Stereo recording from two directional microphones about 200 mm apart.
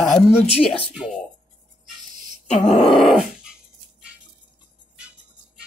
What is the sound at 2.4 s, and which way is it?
Grunt, 30° left (ahead or behind).